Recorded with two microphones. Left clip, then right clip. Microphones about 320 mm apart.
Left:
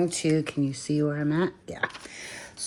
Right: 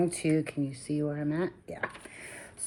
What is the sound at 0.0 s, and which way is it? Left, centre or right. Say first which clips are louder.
Speech: left 3 dB; left.